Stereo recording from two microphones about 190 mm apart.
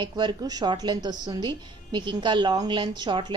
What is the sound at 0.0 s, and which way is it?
A woman's voice, 25° right (ahead or behind).